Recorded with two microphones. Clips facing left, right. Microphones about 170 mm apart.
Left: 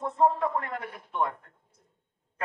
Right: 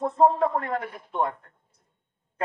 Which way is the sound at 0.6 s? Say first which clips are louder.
Right 5 dB; 35° right (ahead or behind).